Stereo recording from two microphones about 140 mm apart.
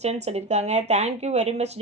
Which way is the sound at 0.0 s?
50° right (ahead or behind).